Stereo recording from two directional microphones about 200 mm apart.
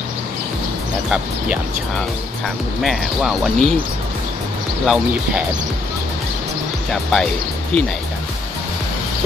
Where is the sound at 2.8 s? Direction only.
Centre (ahead or behind).